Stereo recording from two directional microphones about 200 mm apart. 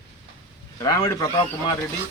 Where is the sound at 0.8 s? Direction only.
15° left (ahead or behind).